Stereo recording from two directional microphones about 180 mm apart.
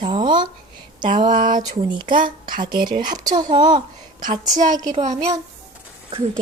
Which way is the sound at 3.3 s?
45° right (ahead or behind).